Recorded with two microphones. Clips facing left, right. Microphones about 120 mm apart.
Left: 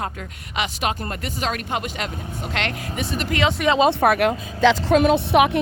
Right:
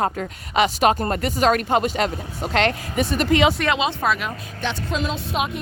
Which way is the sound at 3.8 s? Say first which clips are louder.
Left 6 dB; 60° left (ahead or behind).